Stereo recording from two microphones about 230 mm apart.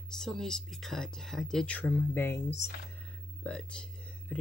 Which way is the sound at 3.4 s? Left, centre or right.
Centre.